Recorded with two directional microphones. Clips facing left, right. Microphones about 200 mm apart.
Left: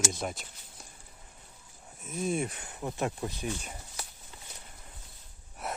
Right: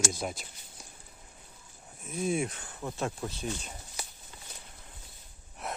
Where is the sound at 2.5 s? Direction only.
15° left (ahead or behind).